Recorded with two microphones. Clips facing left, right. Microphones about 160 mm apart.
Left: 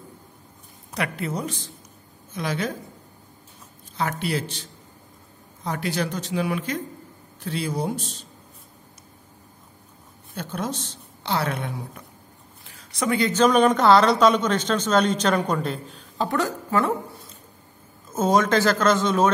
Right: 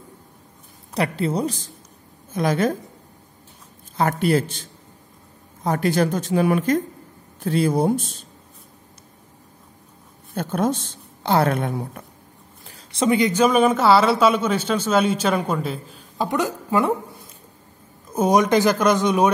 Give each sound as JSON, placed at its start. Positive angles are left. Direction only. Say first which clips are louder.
{"t": 0.9, "sound": "speech", "louder": "right 6 dB", "side_deg": -30}
{"t": 2.3, "sound": "a woman's voice", "louder": "right 7 dB", "side_deg": -50}
{"t": 3.9, "sound": "a woman's voice", "louder": "right 7 dB", "side_deg": -45}
{"t": 10.3, "sound": "a woman's voice", "louder": "right 7 dB", "side_deg": -50}
{"t": 12.6, "sound": "speech", "louder": "right 5 dB", "side_deg": -30}
{"t": 16.3, "sound": "a woman's voice", "louder": "right 2 dB", "side_deg": -15}